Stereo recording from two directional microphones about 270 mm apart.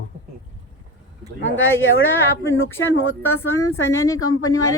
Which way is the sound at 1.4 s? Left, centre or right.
Left.